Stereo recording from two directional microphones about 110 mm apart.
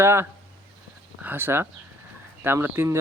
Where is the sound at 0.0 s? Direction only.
25° right (ahead or behind).